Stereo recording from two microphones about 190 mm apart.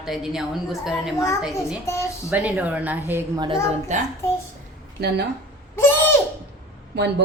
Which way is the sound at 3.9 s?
40° right (ahead or behind).